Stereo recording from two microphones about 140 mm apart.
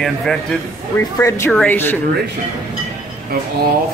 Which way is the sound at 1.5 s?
5° left (ahead or behind).